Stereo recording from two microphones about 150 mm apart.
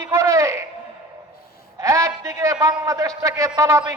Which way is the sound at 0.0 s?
20° right (ahead or behind).